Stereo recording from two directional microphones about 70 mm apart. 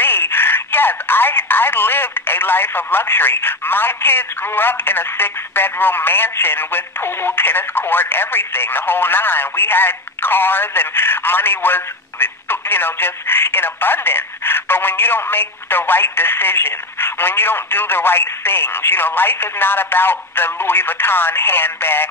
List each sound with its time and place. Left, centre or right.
0.0 s speech: left